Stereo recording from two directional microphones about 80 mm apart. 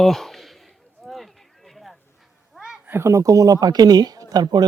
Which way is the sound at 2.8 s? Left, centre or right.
Right.